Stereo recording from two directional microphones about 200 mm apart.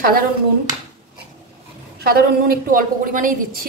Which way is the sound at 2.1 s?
45° right (ahead or behind).